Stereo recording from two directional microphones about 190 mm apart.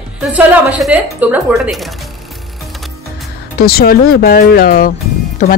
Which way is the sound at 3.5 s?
55° left (ahead or behind).